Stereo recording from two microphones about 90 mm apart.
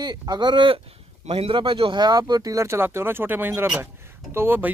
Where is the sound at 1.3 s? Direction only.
85° right.